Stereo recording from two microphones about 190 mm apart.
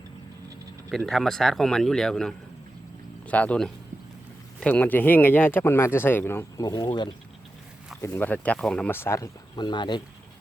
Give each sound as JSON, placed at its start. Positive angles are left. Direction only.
{"t": 0.9, "sound": "speech", "side_deg": 0}
{"t": 8.0, "sound": "speech", "side_deg": 10}